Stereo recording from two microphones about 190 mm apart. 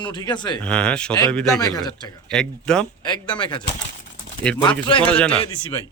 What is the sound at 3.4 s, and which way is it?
Speech, 25° left (ahead or behind).